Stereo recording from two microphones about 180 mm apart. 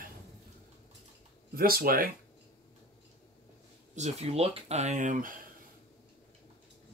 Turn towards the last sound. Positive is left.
turn(degrees=-45)  # may be behind; listen again after turning